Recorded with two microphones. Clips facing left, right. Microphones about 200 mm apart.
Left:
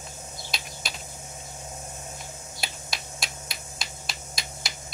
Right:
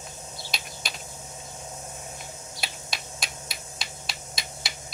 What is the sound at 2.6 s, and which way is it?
Finger snapping, centre (ahead or behind).